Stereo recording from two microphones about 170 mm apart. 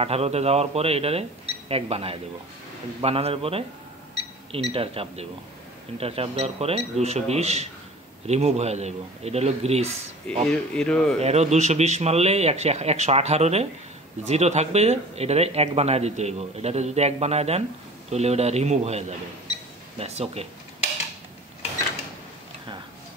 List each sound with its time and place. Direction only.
0.0 s speech: 35° right (ahead or behind)
4.7 s speech: 35° right (ahead or behind)
10.3 s speech: 5° left (ahead or behind)
11.1 s speech: 40° right (ahead or behind)